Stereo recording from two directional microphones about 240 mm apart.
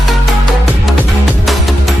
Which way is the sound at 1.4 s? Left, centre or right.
Centre.